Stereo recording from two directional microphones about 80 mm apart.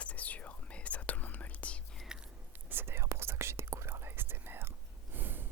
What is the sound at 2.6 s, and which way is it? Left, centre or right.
Whispering, right.